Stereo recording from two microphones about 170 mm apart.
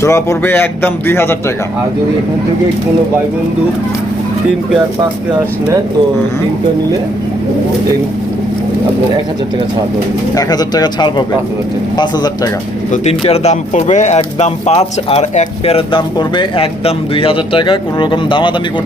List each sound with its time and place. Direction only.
0.0 s speech: 15° left (ahead or behind)
10.3 s speech: 20° left (ahead or behind)
12.9 s speech: 40° left (ahead or behind)